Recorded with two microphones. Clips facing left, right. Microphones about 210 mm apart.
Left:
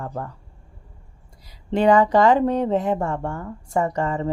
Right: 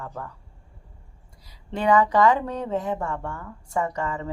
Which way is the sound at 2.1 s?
30° left (ahead or behind).